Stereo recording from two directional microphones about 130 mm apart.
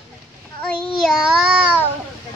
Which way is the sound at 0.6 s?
5° left (ahead or behind).